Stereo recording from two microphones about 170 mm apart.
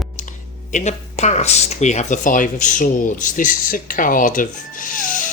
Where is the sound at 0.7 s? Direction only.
40° left (ahead or behind).